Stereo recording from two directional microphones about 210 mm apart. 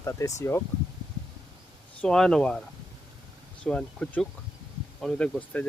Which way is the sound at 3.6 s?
5° left (ahead or behind).